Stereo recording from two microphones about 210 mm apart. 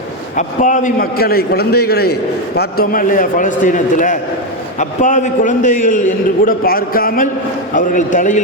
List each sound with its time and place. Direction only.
0.3 s a man's voice: 35° left (ahead or behind)